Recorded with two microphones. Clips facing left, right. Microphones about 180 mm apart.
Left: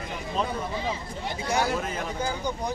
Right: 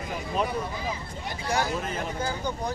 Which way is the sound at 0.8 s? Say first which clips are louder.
Left 2 dB; 25° left (ahead or behind).